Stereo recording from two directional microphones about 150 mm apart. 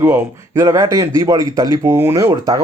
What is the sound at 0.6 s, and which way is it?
Speech, 20° right (ahead or behind).